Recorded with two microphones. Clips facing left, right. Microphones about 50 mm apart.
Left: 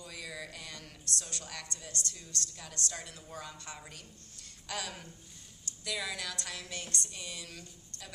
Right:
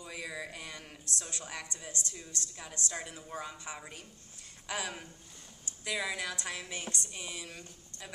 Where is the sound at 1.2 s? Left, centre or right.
Centre.